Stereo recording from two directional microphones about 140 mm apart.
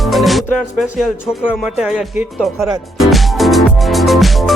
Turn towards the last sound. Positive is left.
turn(degrees=0)  # may be behind; listen again after turning